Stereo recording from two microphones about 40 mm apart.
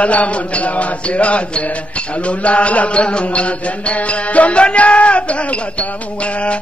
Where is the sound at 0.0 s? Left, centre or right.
Left.